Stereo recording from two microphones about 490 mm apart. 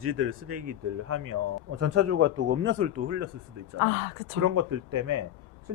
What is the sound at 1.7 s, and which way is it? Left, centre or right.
Speech, right.